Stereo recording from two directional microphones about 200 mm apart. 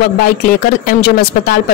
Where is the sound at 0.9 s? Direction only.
55° left (ahead or behind).